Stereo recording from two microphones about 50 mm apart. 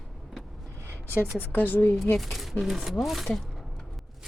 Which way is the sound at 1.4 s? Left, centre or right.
Left.